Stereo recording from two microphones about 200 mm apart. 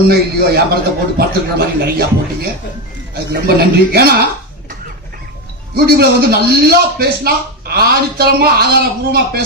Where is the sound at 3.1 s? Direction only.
50° right (ahead or behind).